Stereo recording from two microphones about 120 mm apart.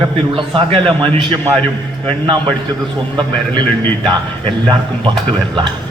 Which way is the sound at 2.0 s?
45° right (ahead or behind).